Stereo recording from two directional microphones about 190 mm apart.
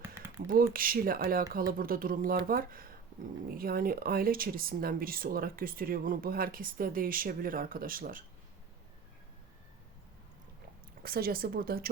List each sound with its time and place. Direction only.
0.4 s speech: 50° right (ahead or behind)
11.0 s speech: 50° right (ahead or behind)